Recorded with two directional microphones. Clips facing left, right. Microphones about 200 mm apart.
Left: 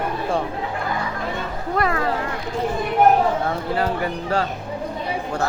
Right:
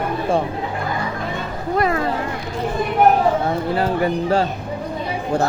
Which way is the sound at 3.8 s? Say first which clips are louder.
Right 5 dB; 25° right (ahead or behind).